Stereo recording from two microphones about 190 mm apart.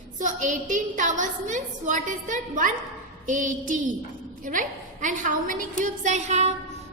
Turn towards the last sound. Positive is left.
turn(degrees=-35)  # may be behind; listen again after turning